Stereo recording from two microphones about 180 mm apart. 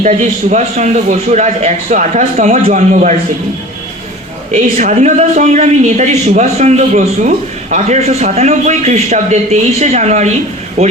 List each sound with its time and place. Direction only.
0.0 s a man's voice: 40° right (ahead or behind)
4.5 s a man's voice: 40° right (ahead or behind)